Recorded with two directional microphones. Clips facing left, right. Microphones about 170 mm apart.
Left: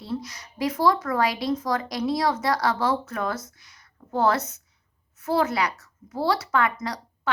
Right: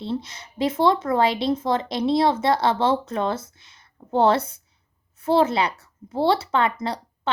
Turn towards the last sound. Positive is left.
turn(degrees=-25)  # may be behind; listen again after turning